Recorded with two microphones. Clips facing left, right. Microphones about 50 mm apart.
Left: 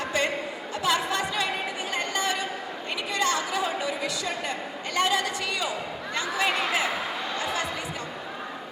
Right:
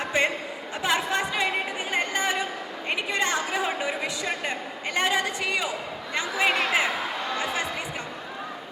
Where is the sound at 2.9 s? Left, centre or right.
Right.